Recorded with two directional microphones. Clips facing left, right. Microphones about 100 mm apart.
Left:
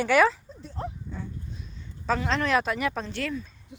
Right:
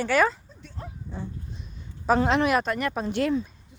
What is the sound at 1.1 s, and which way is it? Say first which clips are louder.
Dog: right 1 dB; 35° right (ahead or behind).